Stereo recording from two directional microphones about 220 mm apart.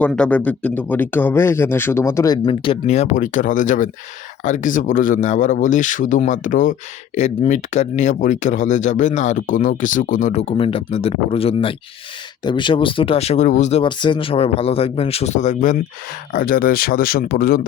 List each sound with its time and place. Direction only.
0.0 s speech: 5° left (ahead or behind); by 17.7 s 45° left (ahead or behind)